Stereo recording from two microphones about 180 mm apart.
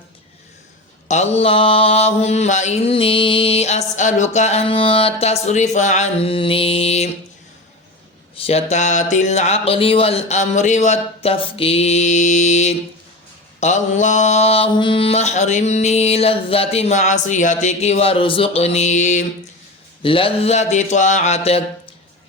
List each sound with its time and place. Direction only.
1.0 s mantra: 40° left (ahead or behind)
8.4 s mantra: 35° left (ahead or behind)
20.0 s mantra: 30° left (ahead or behind)